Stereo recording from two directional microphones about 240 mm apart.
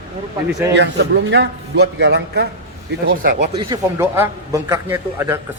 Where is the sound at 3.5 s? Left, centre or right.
Centre.